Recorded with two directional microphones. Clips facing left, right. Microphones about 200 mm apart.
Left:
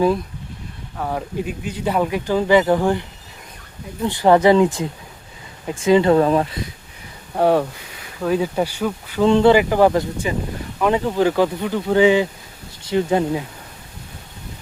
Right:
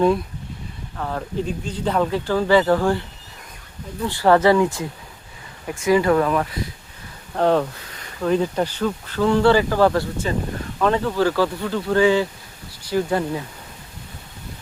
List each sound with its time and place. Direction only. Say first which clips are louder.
0.9 s speech: left 1 dB; 10° left (ahead or behind)
7.3 s speech: left 2 dB; 10° left (ahead or behind)